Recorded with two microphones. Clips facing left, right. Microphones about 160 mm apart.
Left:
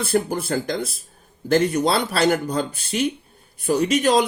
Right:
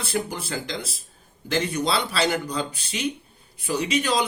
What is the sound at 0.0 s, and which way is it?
Speech, 50° left (ahead or behind).